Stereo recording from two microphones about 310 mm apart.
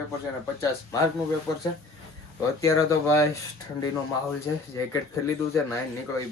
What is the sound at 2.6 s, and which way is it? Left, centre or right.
Speech, centre.